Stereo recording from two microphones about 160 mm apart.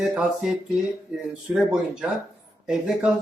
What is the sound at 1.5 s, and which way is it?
A man's voice, 5° right (ahead or behind).